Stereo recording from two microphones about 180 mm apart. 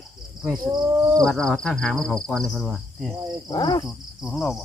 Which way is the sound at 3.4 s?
25° left (ahead or behind).